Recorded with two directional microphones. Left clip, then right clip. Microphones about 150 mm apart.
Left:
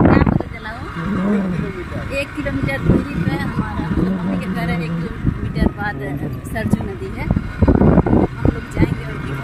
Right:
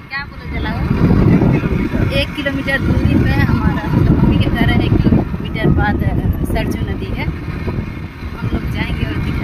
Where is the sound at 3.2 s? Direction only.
5° right (ahead or behind).